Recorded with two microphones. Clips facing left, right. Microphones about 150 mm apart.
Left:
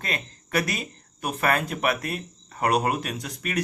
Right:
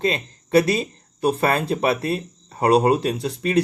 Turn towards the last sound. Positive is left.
turn(degrees=-30)  # may be behind; listen again after turning